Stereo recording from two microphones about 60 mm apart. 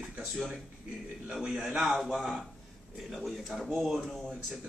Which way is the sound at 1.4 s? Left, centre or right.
Centre.